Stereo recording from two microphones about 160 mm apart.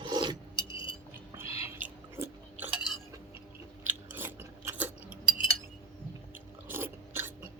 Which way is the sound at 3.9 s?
10° right (ahead or behind).